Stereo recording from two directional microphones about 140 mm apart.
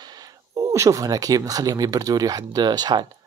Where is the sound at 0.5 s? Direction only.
20° right (ahead or behind).